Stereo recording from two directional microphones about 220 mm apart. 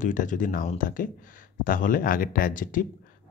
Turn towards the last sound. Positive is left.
turn(degrees=40)  # may be behind; listen again after turning